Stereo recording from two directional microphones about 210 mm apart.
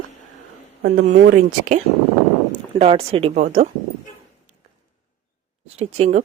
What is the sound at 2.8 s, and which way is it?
Speech, 30° right (ahead or behind).